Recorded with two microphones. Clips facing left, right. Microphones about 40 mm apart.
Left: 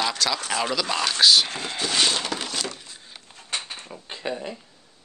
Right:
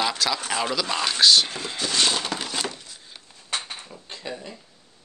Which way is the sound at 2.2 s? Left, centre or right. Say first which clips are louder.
Even; centre.